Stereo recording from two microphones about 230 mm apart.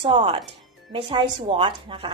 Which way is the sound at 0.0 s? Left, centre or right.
Right.